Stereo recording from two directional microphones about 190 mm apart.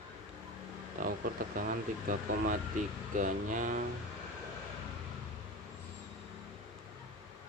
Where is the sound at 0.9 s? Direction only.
45° right (ahead or behind).